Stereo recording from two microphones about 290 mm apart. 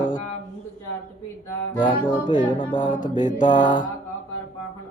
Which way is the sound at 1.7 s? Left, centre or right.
Centre.